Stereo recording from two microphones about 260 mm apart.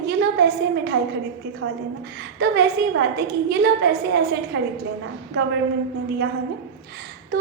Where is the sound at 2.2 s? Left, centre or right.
Right.